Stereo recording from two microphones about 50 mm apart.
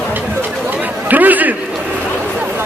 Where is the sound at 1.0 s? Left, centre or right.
Right.